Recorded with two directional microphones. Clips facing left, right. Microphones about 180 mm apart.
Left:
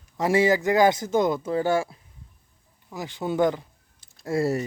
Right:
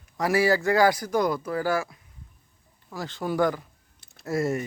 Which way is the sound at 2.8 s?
15° left (ahead or behind).